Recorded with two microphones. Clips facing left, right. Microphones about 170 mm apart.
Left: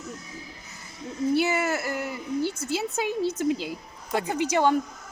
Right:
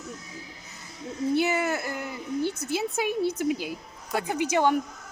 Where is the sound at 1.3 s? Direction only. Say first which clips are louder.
Left 1 dB; 20° right (ahead or behind).